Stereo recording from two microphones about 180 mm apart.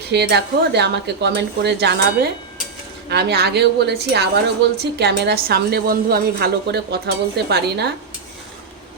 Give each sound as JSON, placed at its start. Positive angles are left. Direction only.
{"t": 0.1, "sound": "a woman's voice", "side_deg": -65}